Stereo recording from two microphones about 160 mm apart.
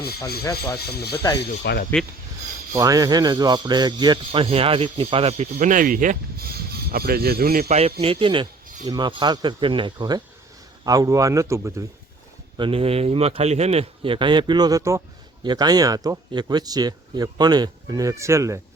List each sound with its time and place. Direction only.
0.8 s speech: 85° left
2.7 s speech: 20° right (ahead or behind); by 5.5 s 35° right (ahead or behind)
5.5 s speech: 55° right (ahead or behind)
6.9 s speech: 75° right (ahead or behind)
7.7 s a man's voice: 40° right (ahead or behind); by 11.7 s 20° right (ahead or behind)
12.5 s a man's voice: 35° right (ahead or behind); by 18.6 s 20° right (ahead or behind)